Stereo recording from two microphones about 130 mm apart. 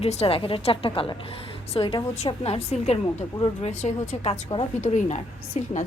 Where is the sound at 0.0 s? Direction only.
50° left (ahead or behind).